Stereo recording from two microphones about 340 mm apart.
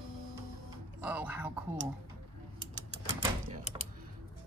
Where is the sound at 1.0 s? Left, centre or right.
Centre.